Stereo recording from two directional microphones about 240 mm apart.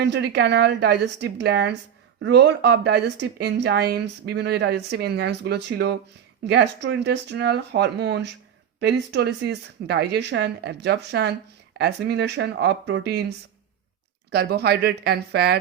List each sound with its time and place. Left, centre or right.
0.0 s a woman's voice: right
14.3 s speech: right